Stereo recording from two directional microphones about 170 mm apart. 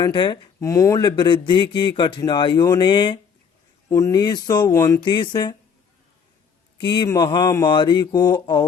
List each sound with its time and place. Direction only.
0.0 s speech: 25° left (ahead or behind)
6.7 s speech: 25° left (ahead or behind)